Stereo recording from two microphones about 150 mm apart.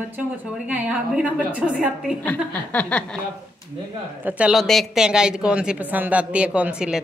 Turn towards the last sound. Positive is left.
turn(degrees=-5)  # may be behind; listen again after turning